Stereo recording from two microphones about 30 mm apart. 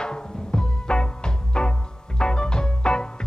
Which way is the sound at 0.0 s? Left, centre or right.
Left.